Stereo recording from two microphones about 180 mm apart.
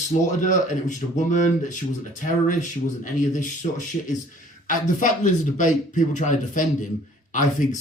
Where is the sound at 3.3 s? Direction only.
45° left (ahead or behind).